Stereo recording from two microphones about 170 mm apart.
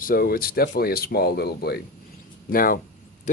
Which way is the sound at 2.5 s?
55° left (ahead or behind).